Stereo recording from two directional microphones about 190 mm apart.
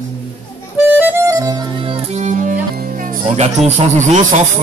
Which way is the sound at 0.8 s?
10° right (ahead or behind).